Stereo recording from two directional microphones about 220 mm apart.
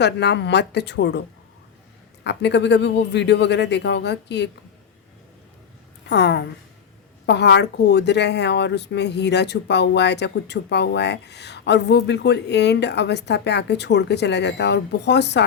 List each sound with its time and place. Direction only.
0.0 s speech: 50° left (ahead or behind)
2.2 s speech: 50° left (ahead or behind)
6.1 s speech: 50° left (ahead or behind)